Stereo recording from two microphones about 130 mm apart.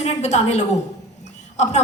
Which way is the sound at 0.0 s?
60° left (ahead or behind).